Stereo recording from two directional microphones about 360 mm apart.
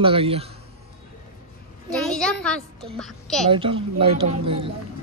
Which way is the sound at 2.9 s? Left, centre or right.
Centre.